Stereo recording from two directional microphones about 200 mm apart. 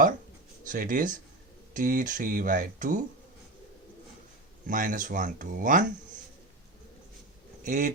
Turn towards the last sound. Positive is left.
turn(degrees=-40)  # may be behind; listen again after turning